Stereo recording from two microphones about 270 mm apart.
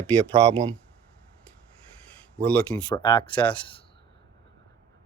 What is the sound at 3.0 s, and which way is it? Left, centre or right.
Speech, centre.